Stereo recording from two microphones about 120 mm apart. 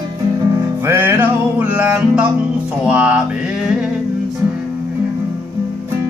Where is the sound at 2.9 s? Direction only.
10° right (ahead or behind).